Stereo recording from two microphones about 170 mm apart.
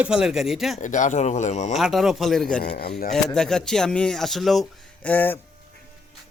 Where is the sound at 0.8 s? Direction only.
45° left (ahead or behind).